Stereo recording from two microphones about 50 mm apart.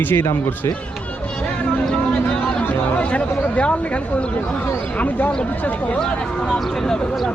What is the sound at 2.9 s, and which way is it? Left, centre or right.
Speech, left.